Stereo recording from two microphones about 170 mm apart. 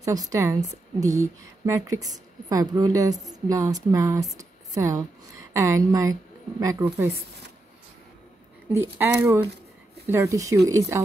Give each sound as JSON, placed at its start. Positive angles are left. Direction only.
{"t": 0.0, "sound": "a woman's voice", "side_deg": -20}
{"t": 8.7, "sound": "speech", "side_deg": -15}